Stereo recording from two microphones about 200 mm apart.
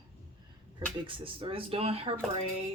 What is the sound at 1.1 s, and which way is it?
Speech, 25° right (ahead or behind).